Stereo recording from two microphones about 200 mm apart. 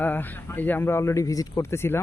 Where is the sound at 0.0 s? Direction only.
10° left (ahead or behind).